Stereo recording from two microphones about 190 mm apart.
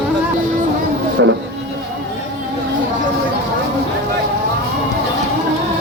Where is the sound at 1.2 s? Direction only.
75° right (ahead or behind).